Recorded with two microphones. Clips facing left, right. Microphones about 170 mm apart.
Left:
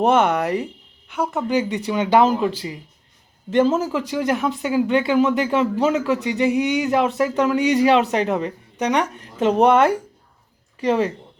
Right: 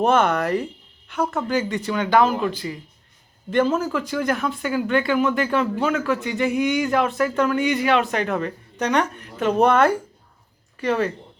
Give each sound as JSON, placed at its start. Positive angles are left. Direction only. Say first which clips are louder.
{"t": 0.0, "sound": "speech", "louder": "left 1 dB", "side_deg": 20}
{"t": 7.7, "sound": "a man's voice", "louder": "left 4 dB", "side_deg": 35}